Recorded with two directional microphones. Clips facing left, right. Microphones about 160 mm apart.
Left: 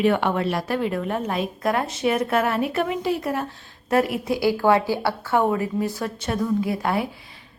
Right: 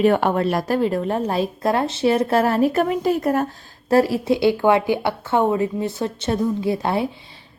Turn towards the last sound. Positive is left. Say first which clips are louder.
# right 3 dB
turn(degrees=-30)  # may be behind; listen again after turning